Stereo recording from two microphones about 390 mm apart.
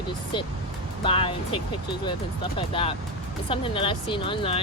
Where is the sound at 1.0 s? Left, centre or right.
Centre.